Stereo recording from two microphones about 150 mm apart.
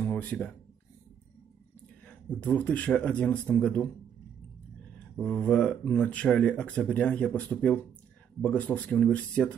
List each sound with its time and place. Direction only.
0.0 s a sound: 10° left (ahead or behind)
2.2 s speech: 10° left (ahead or behind)
5.1 s speech: 10° left (ahead or behind)